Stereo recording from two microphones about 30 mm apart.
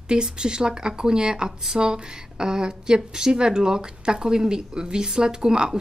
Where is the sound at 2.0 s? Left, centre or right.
Right.